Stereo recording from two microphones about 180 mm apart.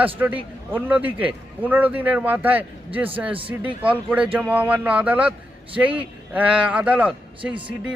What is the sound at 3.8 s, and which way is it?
A man's voice, 5° right (ahead or behind).